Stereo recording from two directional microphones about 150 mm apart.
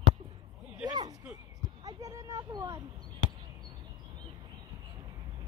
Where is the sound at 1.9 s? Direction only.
20° right (ahead or behind).